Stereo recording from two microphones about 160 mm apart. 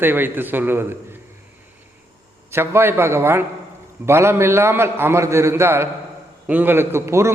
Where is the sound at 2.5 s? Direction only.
15° right (ahead or behind).